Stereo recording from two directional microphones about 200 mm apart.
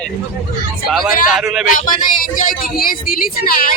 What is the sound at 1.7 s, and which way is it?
Speech, 45° left (ahead or behind).